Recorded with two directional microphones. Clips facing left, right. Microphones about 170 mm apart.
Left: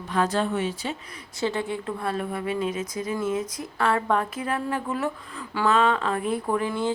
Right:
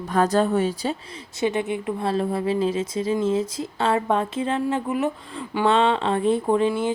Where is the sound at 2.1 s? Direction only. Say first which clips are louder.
Right 6 dB; 30° right (ahead or behind).